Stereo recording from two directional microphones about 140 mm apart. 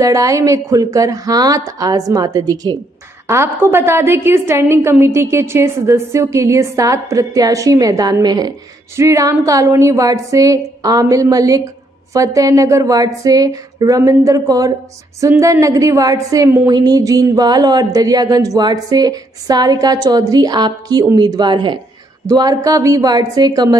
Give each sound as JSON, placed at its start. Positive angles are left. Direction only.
{"t": 0.0, "sound": "a woman's voice", "side_deg": -25}